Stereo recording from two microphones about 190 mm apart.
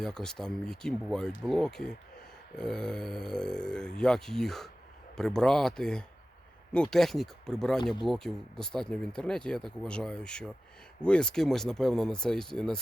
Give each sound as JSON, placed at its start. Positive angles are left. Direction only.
{"t": 0.0, "sound": "speech", "side_deg": 5}